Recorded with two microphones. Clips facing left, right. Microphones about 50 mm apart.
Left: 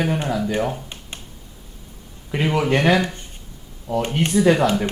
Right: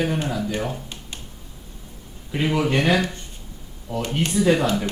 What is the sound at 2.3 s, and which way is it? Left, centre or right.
Speech, left.